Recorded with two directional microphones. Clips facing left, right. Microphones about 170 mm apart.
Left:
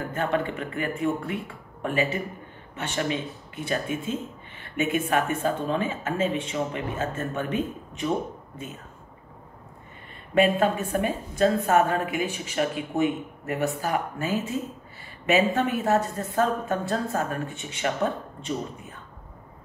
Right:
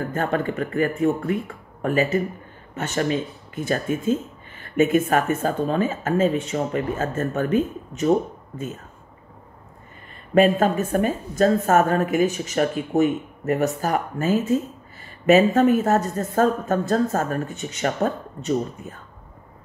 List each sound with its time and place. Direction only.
0.1 s speech: 45° right (ahead or behind)
10.3 s speech: 45° right (ahead or behind)